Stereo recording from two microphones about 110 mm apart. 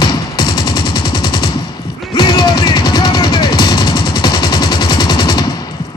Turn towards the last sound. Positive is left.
turn(degrees=40)  # may be behind; listen again after turning